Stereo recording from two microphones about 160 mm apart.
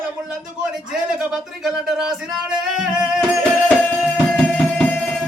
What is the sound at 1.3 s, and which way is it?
Music, 5° right (ahead or behind).